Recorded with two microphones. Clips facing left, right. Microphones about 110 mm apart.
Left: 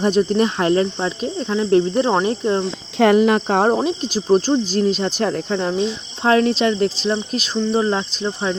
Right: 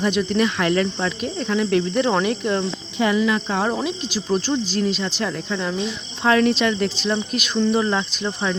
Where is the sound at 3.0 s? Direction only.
60° left (ahead or behind).